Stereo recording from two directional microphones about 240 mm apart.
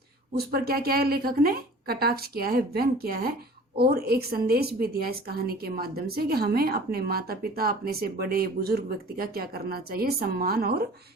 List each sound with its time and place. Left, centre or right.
0.3 s a woman's voice: right